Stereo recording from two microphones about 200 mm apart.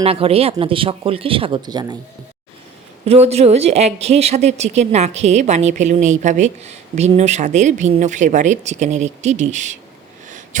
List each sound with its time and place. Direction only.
0.0 s speech: 30° right (ahead or behind)
3.1 s speech: 30° right (ahead or behind)
10.2 s a sound: 40° right (ahead or behind)